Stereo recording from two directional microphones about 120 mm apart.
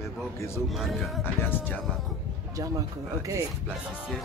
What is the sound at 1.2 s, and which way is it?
Speech, 20° left (ahead or behind).